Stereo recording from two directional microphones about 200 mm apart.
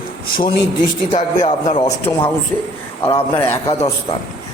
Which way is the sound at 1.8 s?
20° left (ahead or behind).